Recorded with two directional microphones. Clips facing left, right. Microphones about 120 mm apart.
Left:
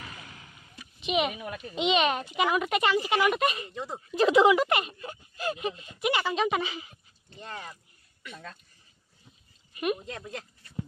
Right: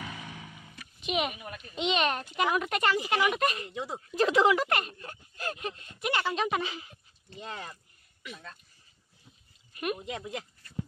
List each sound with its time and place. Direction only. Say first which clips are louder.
0.7 s a sound: left 3 dB; centre (ahead or behind)
1.8 s speech: left 3 dB; 5° left (ahead or behind)
3.7 s speech: even; 5° right (ahead or behind)
4.2 s speech: left 3 dB; 10° left (ahead or behind)
7.5 s a sound: left 1 dB; centre (ahead or behind)
8.3 s speech: left 2 dB; 60° left (ahead or behind)
9.9 s speech: right 2 dB; 10° right (ahead or behind)